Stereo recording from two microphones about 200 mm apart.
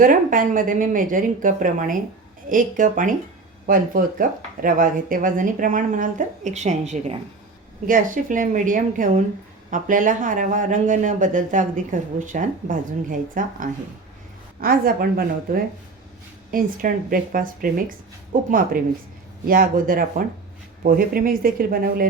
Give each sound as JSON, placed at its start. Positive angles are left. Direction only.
{"t": 0.0, "sound": "speech", "side_deg": -45}